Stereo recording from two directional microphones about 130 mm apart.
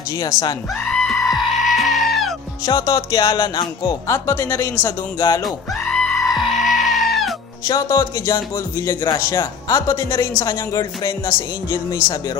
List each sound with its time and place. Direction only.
0.2 s music: 30° left (ahead or behind)
0.8 s goat: 5° left (ahead or behind)
2.6 s music: 30° left (ahead or behind)
4.1 s speech: 20° left (ahead or behind)
5.4 s goat: 5° left (ahead or behind)
7.6 s speech: 30° left (ahead or behind)
12.0 s speech: 10° right (ahead or behind)